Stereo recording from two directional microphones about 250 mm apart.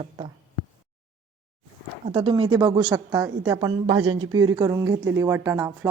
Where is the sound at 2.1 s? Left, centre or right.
Centre.